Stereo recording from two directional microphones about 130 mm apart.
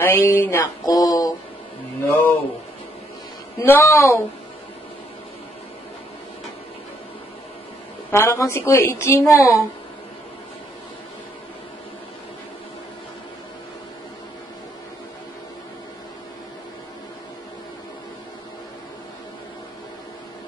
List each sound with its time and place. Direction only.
0.0 s a woman's voice: 15° left (ahead or behind)
2.0 s speech: 15° left (ahead or behind)
3.6 s a woman's voice: 20° left (ahead or behind)
8.1 s a woman's voice: 20° left (ahead or behind)